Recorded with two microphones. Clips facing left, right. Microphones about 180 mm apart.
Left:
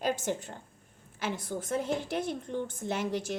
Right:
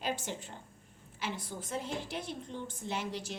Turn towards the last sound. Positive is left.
turn(degrees=50)  # may be behind; listen again after turning